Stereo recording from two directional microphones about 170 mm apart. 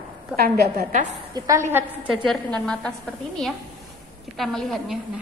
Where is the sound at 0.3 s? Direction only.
5° right (ahead or behind).